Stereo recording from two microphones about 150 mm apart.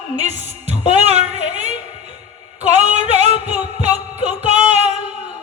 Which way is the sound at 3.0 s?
45° right (ahead or behind).